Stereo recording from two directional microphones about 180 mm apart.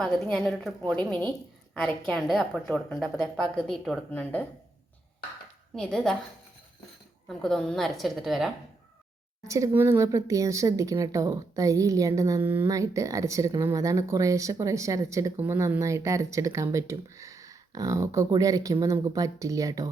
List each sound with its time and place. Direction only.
0.0 s a woman's voice: 5° left (ahead or behind)
5.7 s a woman's voice: 5° left (ahead or behind)
7.3 s a woman's voice: centre (ahead or behind)
9.5 s speech: 15° right (ahead or behind)